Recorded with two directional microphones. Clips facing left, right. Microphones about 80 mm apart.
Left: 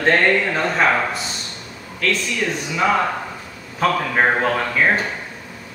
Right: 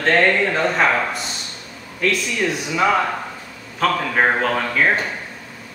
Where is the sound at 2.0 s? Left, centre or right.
Centre.